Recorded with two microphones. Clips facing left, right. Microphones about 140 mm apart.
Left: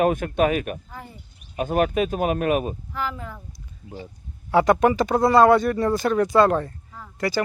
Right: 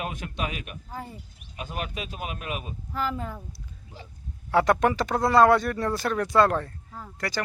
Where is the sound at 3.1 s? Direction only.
35° right (ahead or behind).